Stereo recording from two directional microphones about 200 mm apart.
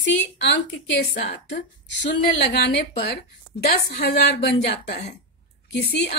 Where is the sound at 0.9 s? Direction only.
55° left (ahead or behind).